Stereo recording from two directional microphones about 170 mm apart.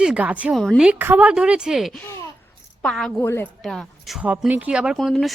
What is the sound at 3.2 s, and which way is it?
Speech, 15° left (ahead or behind).